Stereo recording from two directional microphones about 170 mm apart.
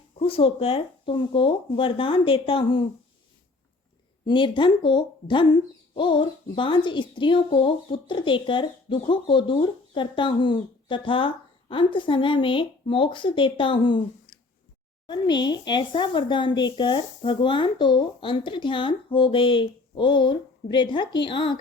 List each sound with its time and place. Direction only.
0.2 s speech: 30° left (ahead or behind)
4.3 s speech: 30° left (ahead or behind)
15.0 s speech: 25° left (ahead or behind)